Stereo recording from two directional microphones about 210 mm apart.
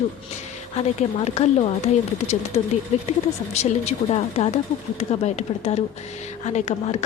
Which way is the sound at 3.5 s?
30° left (ahead or behind).